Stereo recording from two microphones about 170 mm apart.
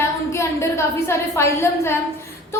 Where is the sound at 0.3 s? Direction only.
15° left (ahead or behind).